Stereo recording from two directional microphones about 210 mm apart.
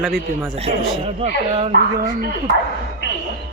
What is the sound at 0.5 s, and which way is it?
Speech, 30° right (ahead or behind).